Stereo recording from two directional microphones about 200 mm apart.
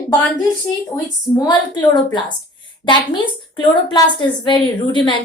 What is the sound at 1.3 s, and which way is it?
A woman's voice, 20° left (ahead or behind).